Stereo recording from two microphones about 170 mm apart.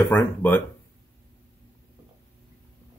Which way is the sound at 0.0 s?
10° left (ahead or behind).